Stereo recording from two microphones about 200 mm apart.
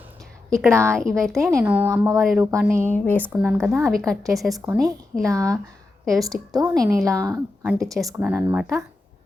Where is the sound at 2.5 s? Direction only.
15° right (ahead or behind).